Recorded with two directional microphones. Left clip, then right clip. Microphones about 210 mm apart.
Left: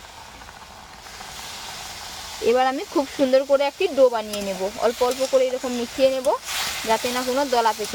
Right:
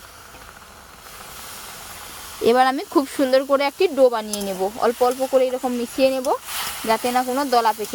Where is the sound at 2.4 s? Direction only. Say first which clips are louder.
Right 3 dB; 60° right (ahead or behind).